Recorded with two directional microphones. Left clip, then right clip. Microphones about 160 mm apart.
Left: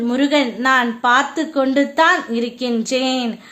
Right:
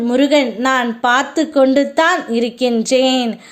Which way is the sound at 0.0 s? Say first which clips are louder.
Right 4 dB; 20° right (ahead or behind).